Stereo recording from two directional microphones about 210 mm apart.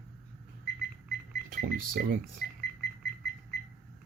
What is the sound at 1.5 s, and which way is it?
Speech, 45° right (ahead or behind).